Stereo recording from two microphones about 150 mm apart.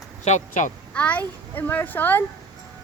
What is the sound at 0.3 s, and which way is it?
Speech, 55° left (ahead or behind).